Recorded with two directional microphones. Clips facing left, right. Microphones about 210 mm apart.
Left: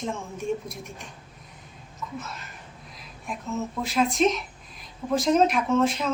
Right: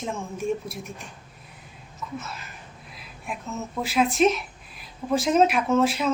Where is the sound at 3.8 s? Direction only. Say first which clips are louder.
Right 2 dB; 5° right (ahead or behind).